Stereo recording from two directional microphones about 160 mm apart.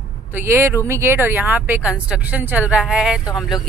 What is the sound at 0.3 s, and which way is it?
A woman's voice, 15° right (ahead or behind).